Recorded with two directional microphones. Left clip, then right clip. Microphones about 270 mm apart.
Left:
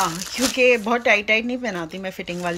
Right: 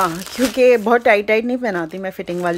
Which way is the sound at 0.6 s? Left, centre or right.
Right.